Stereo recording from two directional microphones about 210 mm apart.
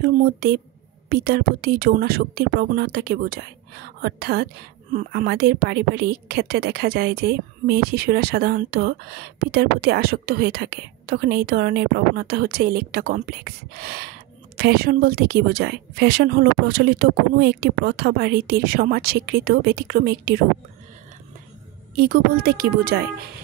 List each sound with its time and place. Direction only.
0.0 s speech: 45° right (ahead or behind)
21.9 s speech: 45° right (ahead or behind)